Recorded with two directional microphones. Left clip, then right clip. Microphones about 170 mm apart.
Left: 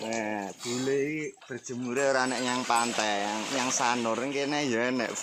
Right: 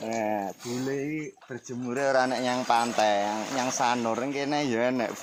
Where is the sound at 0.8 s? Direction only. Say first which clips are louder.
Left 3 dB; 70° right (ahead or behind).